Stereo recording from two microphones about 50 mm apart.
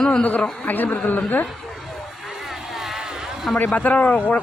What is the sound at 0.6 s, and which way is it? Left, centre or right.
Speech, left.